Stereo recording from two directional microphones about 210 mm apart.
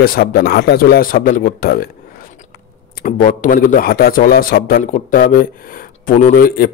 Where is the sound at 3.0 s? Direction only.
40° left (ahead or behind).